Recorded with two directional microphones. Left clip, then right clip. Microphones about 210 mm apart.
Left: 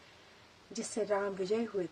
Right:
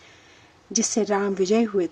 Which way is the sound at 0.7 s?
35° right (ahead or behind).